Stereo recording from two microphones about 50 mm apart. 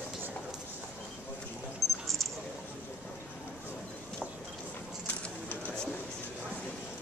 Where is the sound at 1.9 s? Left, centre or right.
Centre.